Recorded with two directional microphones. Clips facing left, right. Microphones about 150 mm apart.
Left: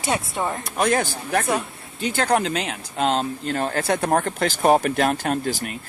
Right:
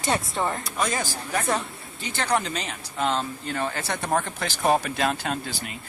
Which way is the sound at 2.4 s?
65° left (ahead or behind).